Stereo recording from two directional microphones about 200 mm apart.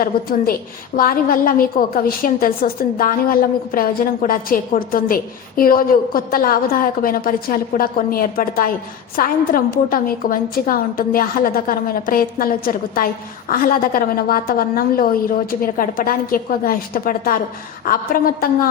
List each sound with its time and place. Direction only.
0.0 s a woman's voice: 45° left (ahead or behind)